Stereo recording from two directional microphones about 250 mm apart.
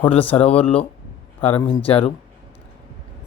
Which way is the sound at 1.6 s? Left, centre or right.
Left.